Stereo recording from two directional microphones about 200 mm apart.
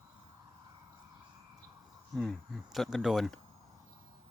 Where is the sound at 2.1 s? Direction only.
Centre (ahead or behind).